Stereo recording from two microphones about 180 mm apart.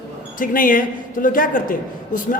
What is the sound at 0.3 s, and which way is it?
A man's voice, 50° left (ahead or behind).